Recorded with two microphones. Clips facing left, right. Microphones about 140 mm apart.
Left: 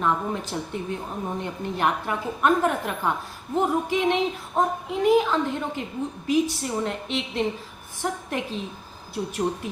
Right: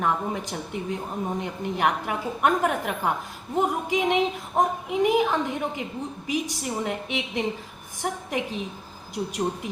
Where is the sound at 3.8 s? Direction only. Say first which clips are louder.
Even; 15° right (ahead or behind).